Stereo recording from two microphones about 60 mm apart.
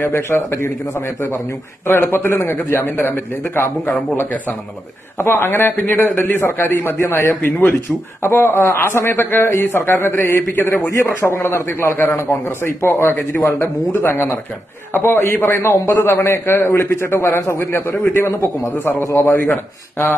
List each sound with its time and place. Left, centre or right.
0.0 s a man's voice: left
5.1 s a man's voice: left
10.7 s a man's voice: left
11.2 s a man's voice: left
13.1 s a man's voice: left
19.0 s a man's voice: left
19.5 s a man's voice: left